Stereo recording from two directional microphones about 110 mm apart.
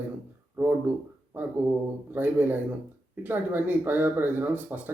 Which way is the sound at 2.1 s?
15° right (ahead or behind).